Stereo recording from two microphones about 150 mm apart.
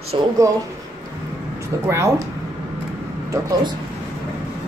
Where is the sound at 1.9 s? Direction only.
20° right (ahead or behind).